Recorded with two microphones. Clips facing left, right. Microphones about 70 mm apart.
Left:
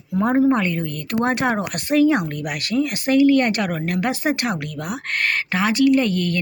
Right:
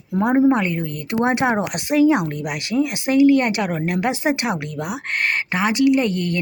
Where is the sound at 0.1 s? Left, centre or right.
Centre.